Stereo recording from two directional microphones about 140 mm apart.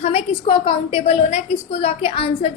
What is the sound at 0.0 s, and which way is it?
A woman's voice, 45° left (ahead or behind).